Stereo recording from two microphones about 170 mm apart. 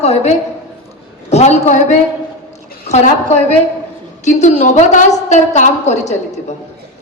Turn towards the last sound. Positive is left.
turn(degrees=40)  # may be behind; listen again after turning